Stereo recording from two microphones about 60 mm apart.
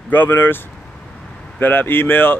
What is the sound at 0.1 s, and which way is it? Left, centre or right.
Speech, left.